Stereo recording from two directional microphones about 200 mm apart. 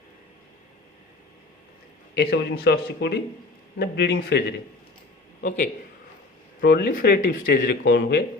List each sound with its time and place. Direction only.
2.1 s speech: 55° left (ahead or behind)
5.4 s a man's voice: 45° left (ahead or behind); by 8.2 s 60° left (ahead or behind)